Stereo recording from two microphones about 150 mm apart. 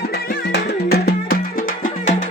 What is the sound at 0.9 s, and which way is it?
Music, 90° left.